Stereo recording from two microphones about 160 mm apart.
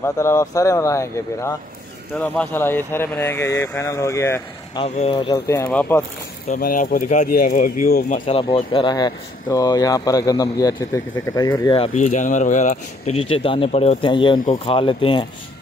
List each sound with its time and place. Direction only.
0.0 s speech: 15° left (ahead or behind)
4.7 s speech: 40° left (ahead or behind); by 5.7 s 25° left (ahead or behind)
5.7 s speech: 10° left (ahead or behind)
6.5 s speech: 60° left (ahead or behind)
8.3 s speech: 35° left (ahead or behind)
11.8 s speech: 50° left (ahead or behind); by 15.2 s 30° left (ahead or behind)